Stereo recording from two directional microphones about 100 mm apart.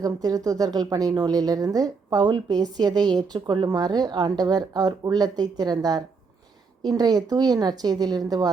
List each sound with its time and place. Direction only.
0.0 s speech: 40° right (ahead or behind)